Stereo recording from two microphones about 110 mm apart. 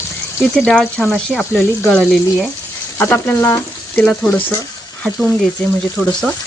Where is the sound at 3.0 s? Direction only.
20° left (ahead or behind).